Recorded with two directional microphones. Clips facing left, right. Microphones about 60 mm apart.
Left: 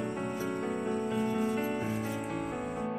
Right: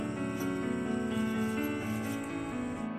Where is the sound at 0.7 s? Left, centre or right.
Centre.